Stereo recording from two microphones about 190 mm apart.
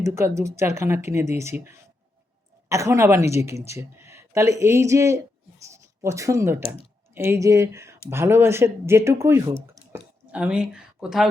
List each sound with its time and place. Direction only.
0.0 s speech: 15° right (ahead or behind)